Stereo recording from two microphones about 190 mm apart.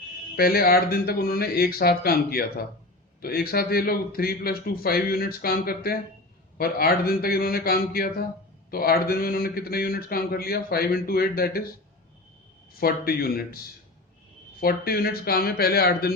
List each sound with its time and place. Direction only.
0.3 s speech: 50° left (ahead or behind)
12.8 s speech: 50° left (ahead or behind)
14.6 s speech: 50° left (ahead or behind)